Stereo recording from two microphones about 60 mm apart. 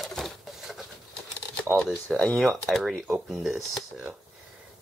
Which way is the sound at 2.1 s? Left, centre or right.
Centre.